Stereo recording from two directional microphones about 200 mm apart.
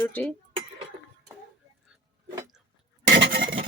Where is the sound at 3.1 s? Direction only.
60° right (ahead or behind).